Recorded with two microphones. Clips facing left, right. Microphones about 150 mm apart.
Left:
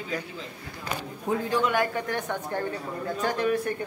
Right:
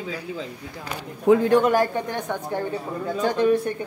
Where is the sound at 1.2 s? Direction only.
80° right.